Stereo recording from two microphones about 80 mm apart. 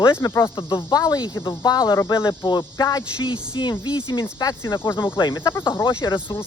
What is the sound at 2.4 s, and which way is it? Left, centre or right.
Speech, left.